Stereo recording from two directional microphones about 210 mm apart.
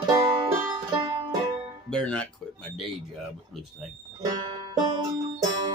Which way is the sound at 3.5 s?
Centre (ahead or behind).